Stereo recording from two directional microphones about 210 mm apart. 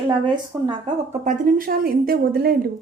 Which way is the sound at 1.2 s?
40° right (ahead or behind).